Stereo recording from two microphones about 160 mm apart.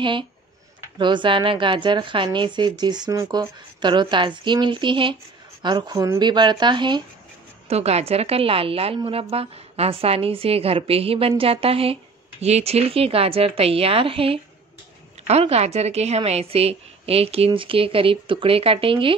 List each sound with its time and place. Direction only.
0.9 s speech: 30° right (ahead or behind)
7.6 s a woman's voice: 40° right (ahead or behind)